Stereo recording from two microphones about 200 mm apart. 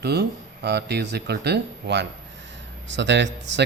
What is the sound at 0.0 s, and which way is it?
Speech, 55° right (ahead or behind).